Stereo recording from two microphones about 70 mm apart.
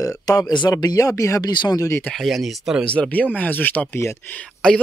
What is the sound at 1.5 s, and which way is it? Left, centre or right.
Speech, left.